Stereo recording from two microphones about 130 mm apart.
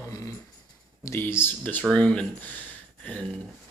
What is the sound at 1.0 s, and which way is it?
A man's voice, 15° left (ahead or behind).